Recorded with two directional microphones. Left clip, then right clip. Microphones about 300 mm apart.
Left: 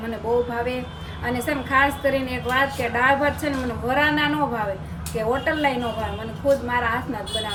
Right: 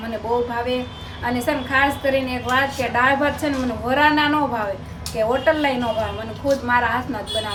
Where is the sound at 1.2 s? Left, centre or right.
Centre.